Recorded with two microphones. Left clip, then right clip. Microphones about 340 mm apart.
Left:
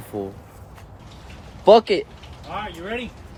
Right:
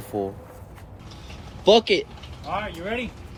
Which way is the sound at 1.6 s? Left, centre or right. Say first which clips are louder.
Left 4 dB; centre.